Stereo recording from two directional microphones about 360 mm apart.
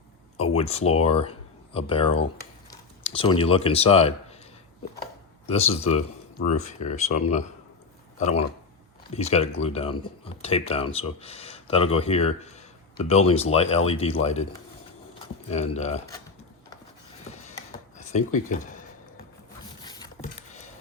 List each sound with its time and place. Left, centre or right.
0.3 s speech: centre
5.5 s speech: centre
9.1 s speech: centre
15.4 s speech: centre
17.9 s speech: left
19.8 s patter: centre